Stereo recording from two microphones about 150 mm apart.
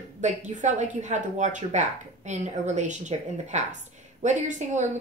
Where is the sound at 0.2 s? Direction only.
50° right (ahead or behind).